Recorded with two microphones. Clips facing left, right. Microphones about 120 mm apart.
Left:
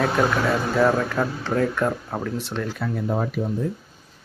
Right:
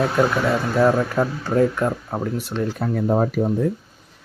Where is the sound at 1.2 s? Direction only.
10° right (ahead or behind).